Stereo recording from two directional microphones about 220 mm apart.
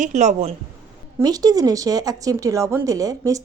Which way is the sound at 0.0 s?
30° right (ahead or behind).